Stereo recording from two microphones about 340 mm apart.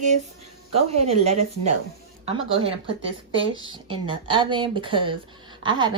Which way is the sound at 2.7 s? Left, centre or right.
Centre.